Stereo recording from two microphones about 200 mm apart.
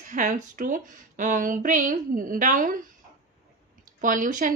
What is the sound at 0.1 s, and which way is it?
Speech, 40° right (ahead or behind).